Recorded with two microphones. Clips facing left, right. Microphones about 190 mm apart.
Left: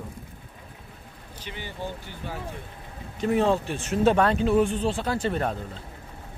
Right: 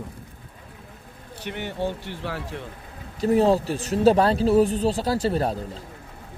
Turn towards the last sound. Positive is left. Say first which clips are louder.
# right 3 dB
turn(degrees=-35)  # may be behind; listen again after turning